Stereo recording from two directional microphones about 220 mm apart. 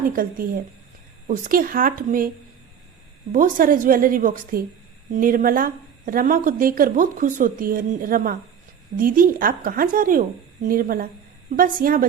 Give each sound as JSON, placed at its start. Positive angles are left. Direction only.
{"t": 0.1, "sound": "a woman's voice", "side_deg": -40}
{"t": 3.3, "sound": "a woman's voice", "side_deg": -40}